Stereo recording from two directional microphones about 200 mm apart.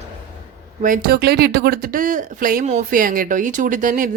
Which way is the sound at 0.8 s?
45° right (ahead or behind).